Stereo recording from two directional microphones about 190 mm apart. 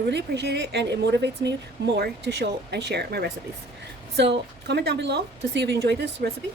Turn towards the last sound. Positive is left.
turn(degrees=-55)  # may be behind; listen again after turning